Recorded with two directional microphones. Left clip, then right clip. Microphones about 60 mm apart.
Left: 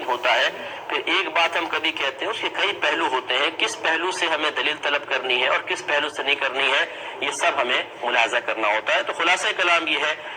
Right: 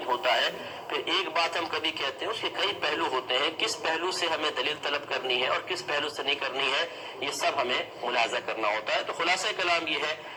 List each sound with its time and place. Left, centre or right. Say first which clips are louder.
0.1 s speech: left 6 dB; centre